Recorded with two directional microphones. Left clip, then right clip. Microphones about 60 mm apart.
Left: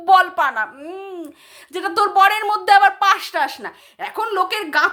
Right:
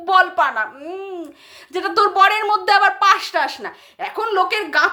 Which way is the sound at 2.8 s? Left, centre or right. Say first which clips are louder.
Even; left.